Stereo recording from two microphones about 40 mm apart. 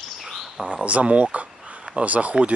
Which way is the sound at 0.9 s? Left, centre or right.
Right.